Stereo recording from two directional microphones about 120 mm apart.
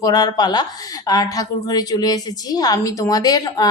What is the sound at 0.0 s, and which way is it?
A woman's voice, 35° left (ahead or behind).